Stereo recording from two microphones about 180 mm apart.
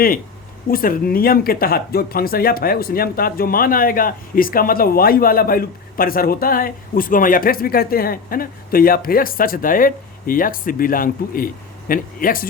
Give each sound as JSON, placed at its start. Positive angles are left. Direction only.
{"t": 0.7, "sound": "speech", "side_deg": 55}